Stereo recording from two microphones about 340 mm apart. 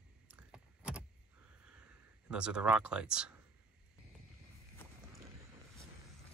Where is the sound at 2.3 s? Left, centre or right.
Centre.